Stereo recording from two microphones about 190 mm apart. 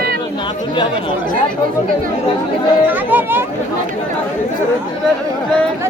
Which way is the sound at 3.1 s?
10° right (ahead or behind).